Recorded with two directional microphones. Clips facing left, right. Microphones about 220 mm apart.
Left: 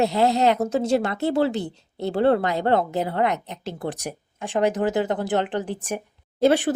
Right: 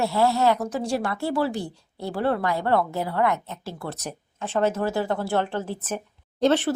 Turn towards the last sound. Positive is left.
turn(degrees=10)  # may be behind; listen again after turning